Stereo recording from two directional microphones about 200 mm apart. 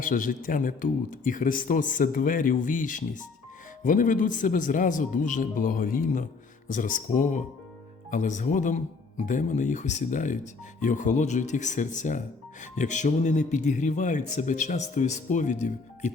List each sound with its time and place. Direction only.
0.0 s speech: 40° left (ahead or behind)